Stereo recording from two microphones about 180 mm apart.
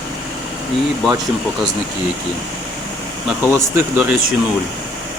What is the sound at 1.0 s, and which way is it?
Speech, centre (ahead or behind).